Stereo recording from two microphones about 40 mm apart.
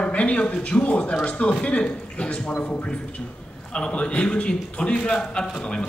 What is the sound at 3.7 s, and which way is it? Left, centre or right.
A man's voice, left.